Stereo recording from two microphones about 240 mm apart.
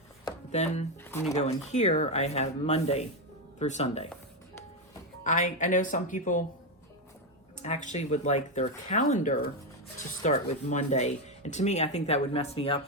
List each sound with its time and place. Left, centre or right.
0.5 s speech: left
1.0 s speech: centre
1.3 s speech: left
5.2 s speech: left
7.6 s speech: left